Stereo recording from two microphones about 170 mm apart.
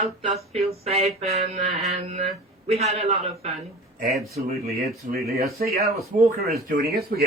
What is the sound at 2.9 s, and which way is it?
Speech, 40° right (ahead or behind).